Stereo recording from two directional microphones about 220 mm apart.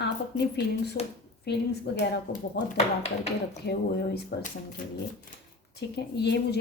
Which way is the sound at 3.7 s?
45° left (ahead or behind).